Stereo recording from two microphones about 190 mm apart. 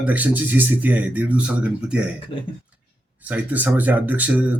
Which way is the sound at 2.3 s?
25° left (ahead or behind).